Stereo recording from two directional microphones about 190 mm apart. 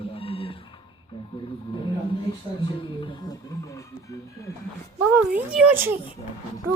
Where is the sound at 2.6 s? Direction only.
25° left (ahead or behind).